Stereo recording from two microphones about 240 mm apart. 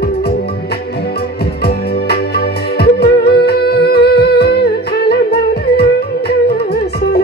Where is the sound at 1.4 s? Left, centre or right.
Left.